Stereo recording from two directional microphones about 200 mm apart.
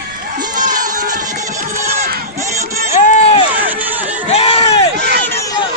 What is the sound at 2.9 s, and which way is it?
Run, 35° left (ahead or behind).